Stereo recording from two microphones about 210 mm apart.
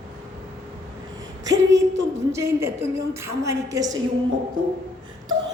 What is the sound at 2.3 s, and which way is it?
A woman's voice, 15° right (ahead or behind).